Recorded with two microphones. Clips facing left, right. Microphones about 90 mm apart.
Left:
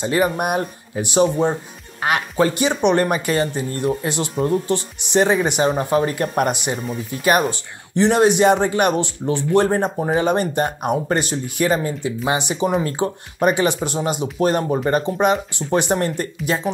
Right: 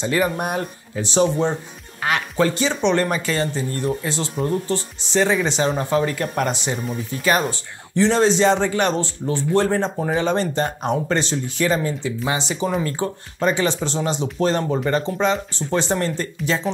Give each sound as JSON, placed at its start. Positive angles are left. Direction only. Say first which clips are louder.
{"t": 0.2, "sound": "speech", "louder": "left 3 dB", "side_deg": 10}